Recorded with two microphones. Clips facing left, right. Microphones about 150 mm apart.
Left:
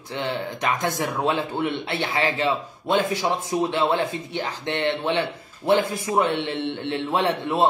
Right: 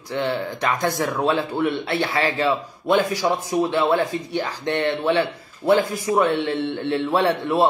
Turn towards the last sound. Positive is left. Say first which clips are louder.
# right 3 dB
turn(degrees=20)  # may be behind; listen again after turning